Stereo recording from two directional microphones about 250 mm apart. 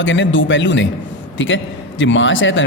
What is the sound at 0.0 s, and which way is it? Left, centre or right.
A man's voice, left.